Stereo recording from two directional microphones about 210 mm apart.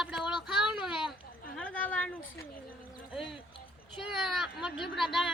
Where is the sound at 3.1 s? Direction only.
Centre (ahead or behind).